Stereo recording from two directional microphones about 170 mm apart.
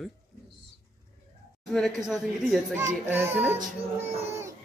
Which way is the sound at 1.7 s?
Centre (ahead or behind).